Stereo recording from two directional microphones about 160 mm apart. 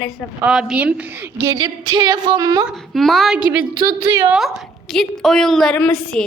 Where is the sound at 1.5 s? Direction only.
30° right (ahead or behind).